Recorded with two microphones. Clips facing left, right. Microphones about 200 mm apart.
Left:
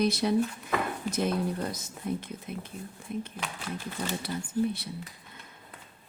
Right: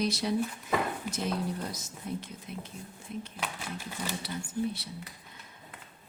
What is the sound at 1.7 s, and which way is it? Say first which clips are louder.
A woman's voice: left 4 dB; 55° left (ahead or behind).